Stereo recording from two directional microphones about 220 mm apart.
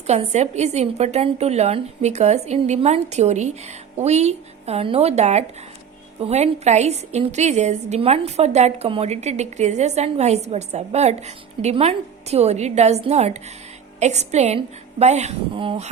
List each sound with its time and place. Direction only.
0.1 s a woman's voice: 30° right (ahead or behind)